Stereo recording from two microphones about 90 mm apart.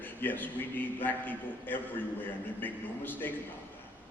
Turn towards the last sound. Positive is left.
turn(degrees=20)  # may be behind; listen again after turning